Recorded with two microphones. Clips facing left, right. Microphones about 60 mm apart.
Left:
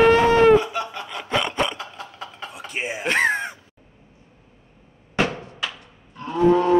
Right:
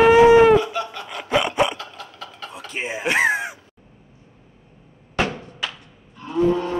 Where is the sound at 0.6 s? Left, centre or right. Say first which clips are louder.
Right 1 dB; left.